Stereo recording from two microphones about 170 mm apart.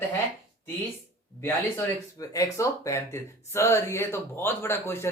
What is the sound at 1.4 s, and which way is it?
Speech, 15° left (ahead or behind).